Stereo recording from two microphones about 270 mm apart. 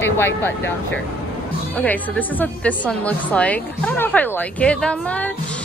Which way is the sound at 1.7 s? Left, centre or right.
Centre.